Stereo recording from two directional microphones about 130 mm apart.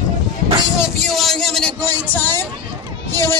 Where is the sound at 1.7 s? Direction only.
15° left (ahead or behind).